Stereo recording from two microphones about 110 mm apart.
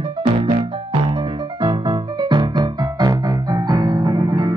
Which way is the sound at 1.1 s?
50° right (ahead or behind).